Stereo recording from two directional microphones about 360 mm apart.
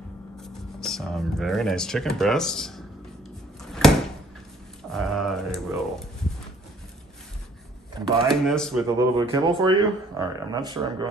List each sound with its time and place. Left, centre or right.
0.4 s speech: centre
3.8 s a sound: centre
4.9 s speech: centre
8.2 s speech: centre
8.9 s speech: centre